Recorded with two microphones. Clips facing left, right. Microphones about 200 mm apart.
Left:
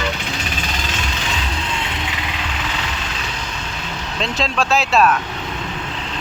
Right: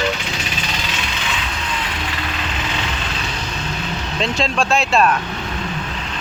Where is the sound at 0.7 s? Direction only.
45° left (ahead or behind).